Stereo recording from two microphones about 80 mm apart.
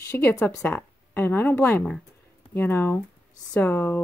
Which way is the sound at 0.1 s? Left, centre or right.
Centre.